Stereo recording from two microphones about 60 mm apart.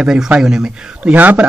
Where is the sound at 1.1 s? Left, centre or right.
Right.